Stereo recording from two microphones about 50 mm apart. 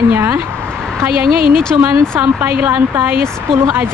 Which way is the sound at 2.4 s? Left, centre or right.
Right.